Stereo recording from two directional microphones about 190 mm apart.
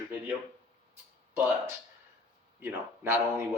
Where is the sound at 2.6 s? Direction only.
10° right (ahead or behind).